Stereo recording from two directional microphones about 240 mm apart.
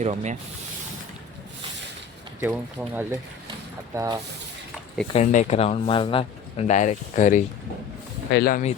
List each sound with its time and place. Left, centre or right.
0.0 s speech: right
2.4 s speech: centre
5.1 s speech: left